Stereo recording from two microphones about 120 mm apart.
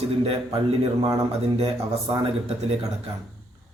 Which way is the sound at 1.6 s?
45° right (ahead or behind).